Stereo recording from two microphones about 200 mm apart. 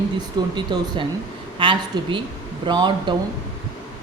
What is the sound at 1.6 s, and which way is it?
Speech, 25° right (ahead or behind).